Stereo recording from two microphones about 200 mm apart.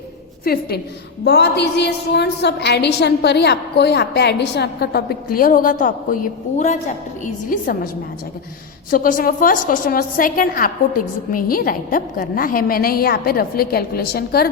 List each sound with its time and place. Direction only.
0.4 s a woman's voice: 50° left (ahead or behind)
8.9 s a woman's voice: 45° left (ahead or behind)